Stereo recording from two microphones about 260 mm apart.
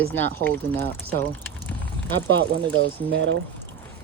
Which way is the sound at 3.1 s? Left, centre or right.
Right.